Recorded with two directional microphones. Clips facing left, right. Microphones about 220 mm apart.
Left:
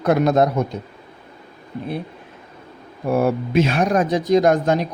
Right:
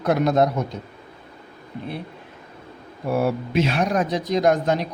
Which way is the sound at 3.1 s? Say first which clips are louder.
Left 3 dB; 50° left (ahead or behind).